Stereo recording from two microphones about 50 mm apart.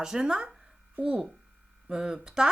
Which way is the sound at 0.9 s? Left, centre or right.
Right.